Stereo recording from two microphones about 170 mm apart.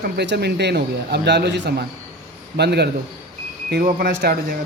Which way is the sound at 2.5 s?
75° right (ahead or behind).